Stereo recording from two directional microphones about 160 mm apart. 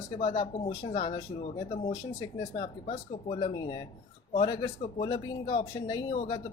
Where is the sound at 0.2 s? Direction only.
35° left (ahead or behind).